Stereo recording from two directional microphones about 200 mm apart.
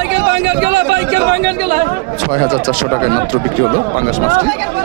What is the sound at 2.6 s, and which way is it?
Speech, 45° right (ahead or behind).